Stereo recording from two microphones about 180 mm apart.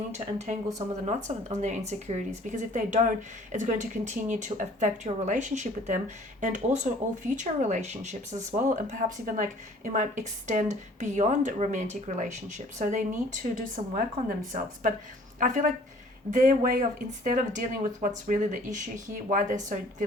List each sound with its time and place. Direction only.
0.1 s speech: 40° right (ahead or behind)